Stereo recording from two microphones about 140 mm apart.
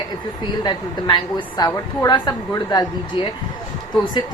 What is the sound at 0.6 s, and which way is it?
A woman's voice, 30° left (ahead or behind).